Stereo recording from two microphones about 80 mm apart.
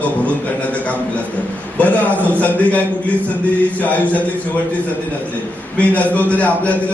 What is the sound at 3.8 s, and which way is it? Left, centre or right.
Speech, centre.